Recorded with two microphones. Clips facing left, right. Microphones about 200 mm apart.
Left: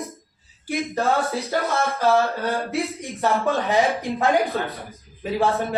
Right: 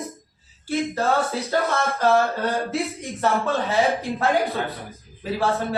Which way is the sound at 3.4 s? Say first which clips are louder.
Left 1 dB; 15° left (ahead or behind).